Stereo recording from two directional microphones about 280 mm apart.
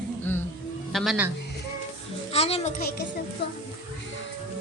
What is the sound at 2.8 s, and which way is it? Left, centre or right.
Speech, left.